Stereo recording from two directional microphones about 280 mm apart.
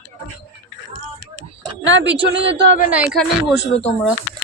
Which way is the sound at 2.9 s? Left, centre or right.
Centre.